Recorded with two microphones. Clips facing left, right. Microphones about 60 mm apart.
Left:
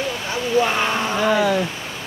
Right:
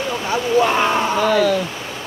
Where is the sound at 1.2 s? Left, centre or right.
Centre.